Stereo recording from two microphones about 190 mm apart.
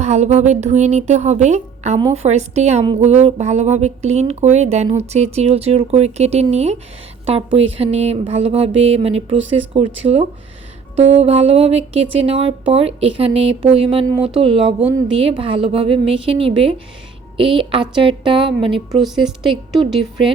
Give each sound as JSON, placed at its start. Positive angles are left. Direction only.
{"t": 0.0, "sound": "speech", "side_deg": -35}